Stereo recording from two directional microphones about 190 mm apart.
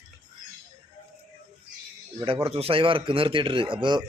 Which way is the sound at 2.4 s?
30° right (ahead or behind).